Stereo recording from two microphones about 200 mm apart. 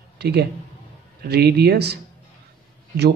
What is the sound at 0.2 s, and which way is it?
Speech, 55° right (ahead or behind).